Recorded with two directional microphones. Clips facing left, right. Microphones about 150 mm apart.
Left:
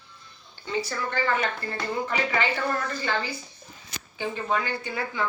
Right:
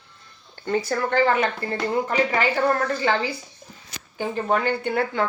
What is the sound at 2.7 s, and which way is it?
Speech, 70° right (ahead or behind).